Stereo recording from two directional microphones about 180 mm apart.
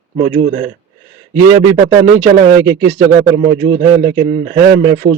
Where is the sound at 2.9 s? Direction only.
35° right (ahead or behind).